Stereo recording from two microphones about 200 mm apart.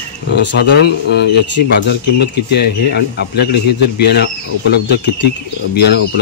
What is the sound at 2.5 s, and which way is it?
Speech, 55° left (ahead or behind).